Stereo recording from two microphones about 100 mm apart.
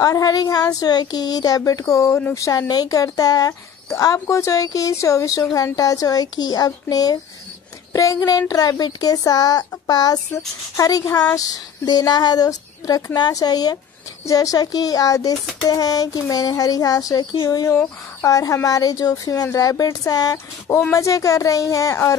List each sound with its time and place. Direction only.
0.0 s speech: 40° left (ahead or behind)